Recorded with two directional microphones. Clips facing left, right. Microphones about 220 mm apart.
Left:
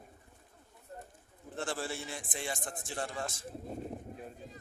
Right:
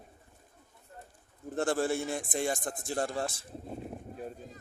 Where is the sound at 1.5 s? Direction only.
45° right (ahead or behind).